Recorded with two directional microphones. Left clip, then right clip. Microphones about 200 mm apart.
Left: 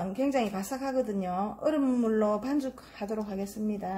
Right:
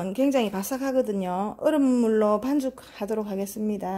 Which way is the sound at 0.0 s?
50° right (ahead or behind).